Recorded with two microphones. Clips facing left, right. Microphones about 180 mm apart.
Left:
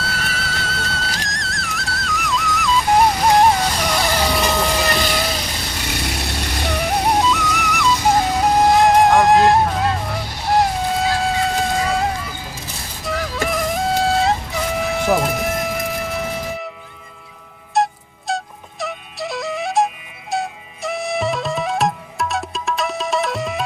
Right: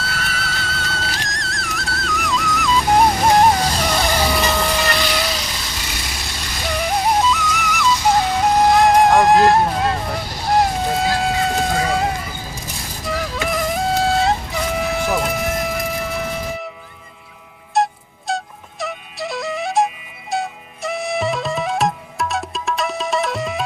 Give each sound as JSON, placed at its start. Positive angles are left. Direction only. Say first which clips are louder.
{"t": 0.0, "sound": "music", "louder": "even", "side_deg": 0}
{"t": 5.2, "sound": "vehicle", "louder": "left 1 dB", "side_deg": 50}
{"t": 6.7, "sound": "music", "louder": "even", "side_deg": 0}
{"t": 10.5, "sound": "a sound", "louder": "even", "side_deg": 0}
{"t": 13.1, "sound": "music", "louder": "left 1 dB", "side_deg": 0}
{"t": 17.8, "sound": "music", "louder": "even", "side_deg": 0}
{"t": 20.3, "sound": "flute", "louder": "even", "side_deg": 0}